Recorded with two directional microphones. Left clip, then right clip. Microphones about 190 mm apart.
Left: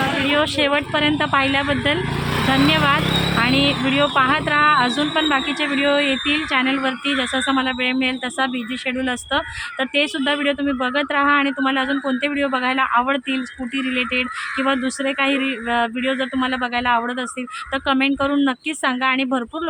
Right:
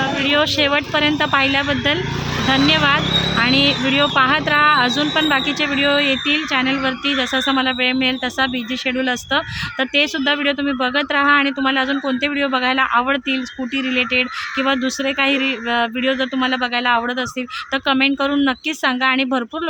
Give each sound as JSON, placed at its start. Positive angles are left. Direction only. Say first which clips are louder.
{"t": 0.3, "sound": "a woman's voice", "louder": "right 4 dB", "side_deg": -15}
{"t": 3.1, "sound": "vehicle", "louder": "right 2 dB", "side_deg": 60}
{"t": 3.3, "sound": "a woman's voice", "louder": "right 2 dB", "side_deg": -15}